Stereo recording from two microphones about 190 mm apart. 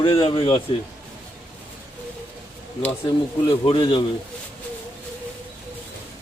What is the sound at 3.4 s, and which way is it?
Speech, 25° left (ahead or behind).